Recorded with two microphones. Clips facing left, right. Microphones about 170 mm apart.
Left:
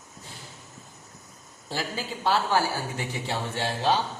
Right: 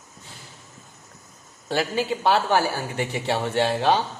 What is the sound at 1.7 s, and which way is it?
A man's voice, 70° right (ahead or behind).